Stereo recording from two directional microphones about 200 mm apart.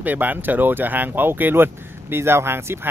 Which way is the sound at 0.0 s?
10° right (ahead or behind).